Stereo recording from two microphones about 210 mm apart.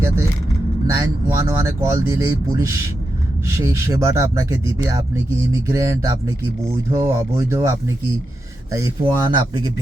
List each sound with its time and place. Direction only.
0.9 s speech: 15° right (ahead or behind)